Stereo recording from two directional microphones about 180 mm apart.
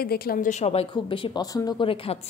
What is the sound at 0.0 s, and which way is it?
Speech, 55° left (ahead or behind).